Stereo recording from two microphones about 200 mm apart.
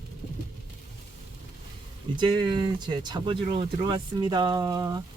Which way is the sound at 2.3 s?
20° right (ahead or behind).